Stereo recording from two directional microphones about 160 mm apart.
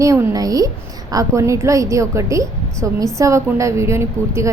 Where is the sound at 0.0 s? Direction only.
20° right (ahead or behind).